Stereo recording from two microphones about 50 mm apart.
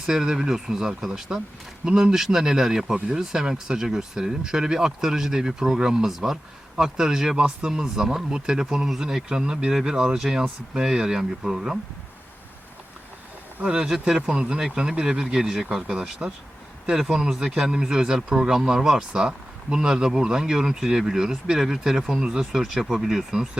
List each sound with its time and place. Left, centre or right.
0.0 s speech: centre
13.7 s speech: centre
22.5 s speech: centre